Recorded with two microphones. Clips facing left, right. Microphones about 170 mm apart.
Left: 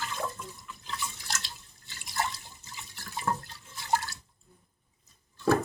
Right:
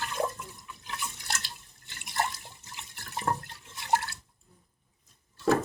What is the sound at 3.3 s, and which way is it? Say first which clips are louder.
Water: right 1 dB; 35° right (ahead or behind).